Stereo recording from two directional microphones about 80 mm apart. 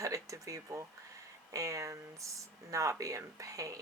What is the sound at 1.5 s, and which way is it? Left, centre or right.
Speech, right.